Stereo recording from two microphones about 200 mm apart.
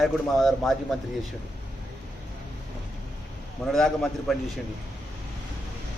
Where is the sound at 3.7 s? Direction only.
Centre (ahead or behind).